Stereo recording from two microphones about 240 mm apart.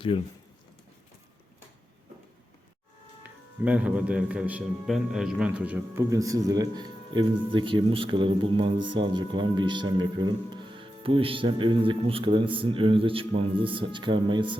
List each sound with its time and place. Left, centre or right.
0.1 s speech: left
3.6 s a man's voice: centre